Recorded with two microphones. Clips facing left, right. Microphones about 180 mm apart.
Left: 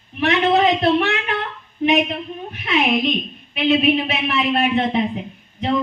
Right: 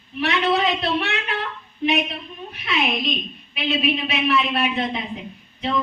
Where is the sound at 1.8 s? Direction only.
55° left (ahead or behind).